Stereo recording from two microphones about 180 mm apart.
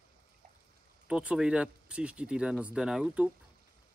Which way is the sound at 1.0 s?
5° right (ahead or behind).